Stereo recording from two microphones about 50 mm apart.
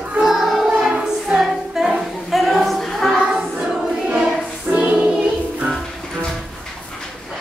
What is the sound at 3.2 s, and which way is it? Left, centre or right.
Music, centre.